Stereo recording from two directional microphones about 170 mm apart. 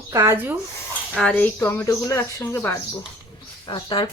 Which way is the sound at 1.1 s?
5° left (ahead or behind).